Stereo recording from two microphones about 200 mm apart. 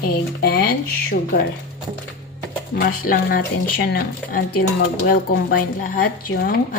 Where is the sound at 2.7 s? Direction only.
45° left (ahead or behind).